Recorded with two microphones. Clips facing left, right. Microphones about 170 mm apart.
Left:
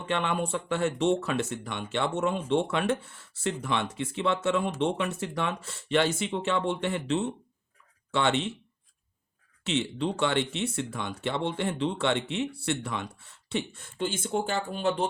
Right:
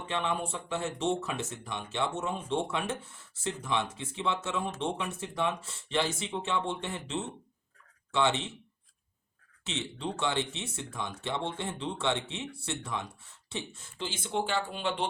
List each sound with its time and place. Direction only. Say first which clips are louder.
0.1 s speech: left 4 dB; 65° left (ahead or behind)
9.6 s speech: left 7 dB; 65° left (ahead or behind)
14.0 s speech: left 4 dB; 50° left (ahead or behind)